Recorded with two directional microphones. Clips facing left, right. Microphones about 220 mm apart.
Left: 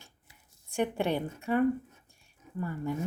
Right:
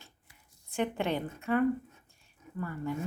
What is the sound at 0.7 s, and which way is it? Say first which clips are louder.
A woman's voice: left 2 dB; 15° left (ahead or behind).